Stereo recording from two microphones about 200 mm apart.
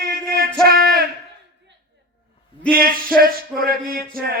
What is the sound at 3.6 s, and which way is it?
Speech, 45° right (ahead or behind).